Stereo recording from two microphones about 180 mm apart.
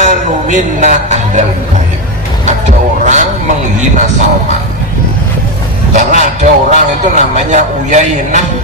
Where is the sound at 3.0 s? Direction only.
40° right (ahead or behind).